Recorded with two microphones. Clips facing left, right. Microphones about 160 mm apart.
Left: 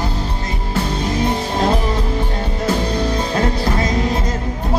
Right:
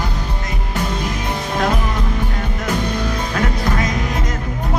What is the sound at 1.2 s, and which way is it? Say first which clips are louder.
Music: left 3 dB; 30° left (ahead or behind).